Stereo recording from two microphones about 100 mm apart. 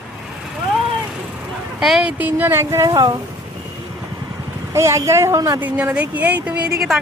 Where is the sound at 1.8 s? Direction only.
5° right (ahead or behind); by 3.2 s 35° right (ahead or behind).